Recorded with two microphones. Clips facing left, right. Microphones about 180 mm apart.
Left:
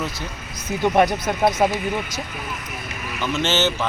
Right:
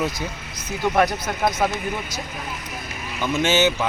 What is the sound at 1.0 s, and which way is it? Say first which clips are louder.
Speech: left 2 dB; 20° left (ahead or behind).